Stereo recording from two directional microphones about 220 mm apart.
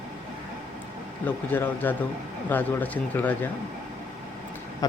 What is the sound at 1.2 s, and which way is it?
Speech, 10° left (ahead or behind).